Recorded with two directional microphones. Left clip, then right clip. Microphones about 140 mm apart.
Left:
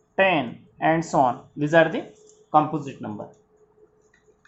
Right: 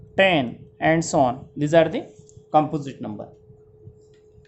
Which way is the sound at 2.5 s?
65° right (ahead or behind).